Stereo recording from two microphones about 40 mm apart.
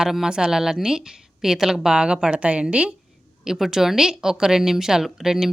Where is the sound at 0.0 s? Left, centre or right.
Centre.